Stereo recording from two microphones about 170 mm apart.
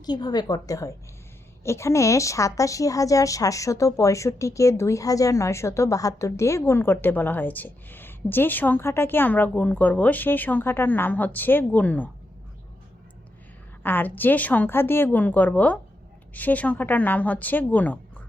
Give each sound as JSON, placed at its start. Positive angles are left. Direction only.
{"t": 0.0, "sound": "a woman's voice", "side_deg": 25}
{"t": 13.8, "sound": "a woman's voice", "side_deg": 10}